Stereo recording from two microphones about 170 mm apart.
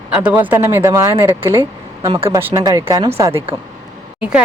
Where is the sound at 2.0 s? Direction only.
30° right (ahead or behind).